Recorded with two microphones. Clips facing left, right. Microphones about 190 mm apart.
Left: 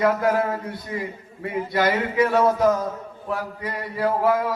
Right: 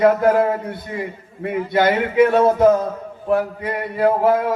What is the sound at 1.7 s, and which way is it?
Speech, 25° right (ahead or behind).